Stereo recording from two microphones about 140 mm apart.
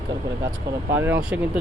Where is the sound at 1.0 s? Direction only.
15° right (ahead or behind).